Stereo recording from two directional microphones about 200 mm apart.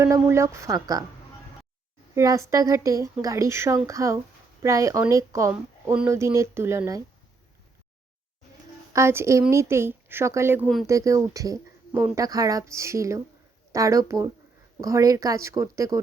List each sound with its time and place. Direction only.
0.0 s speech: 15° right (ahead or behind)
2.1 s speech: 15° right (ahead or behind)
8.9 s speech: 15° right (ahead or behind)